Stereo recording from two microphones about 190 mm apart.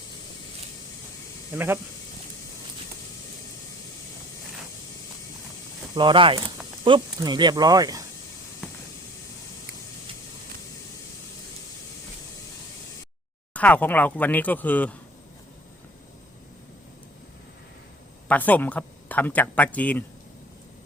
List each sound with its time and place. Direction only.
1.5 s speech: 10° right (ahead or behind)
5.9 s speech: 25° right (ahead or behind)
13.5 s speech: 10° left (ahead or behind)
18.3 s speech: 10° left (ahead or behind)